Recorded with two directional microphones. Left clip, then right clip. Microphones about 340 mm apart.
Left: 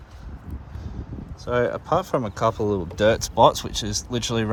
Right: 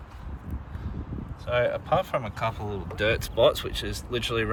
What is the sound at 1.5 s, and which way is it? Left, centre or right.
Speech, centre.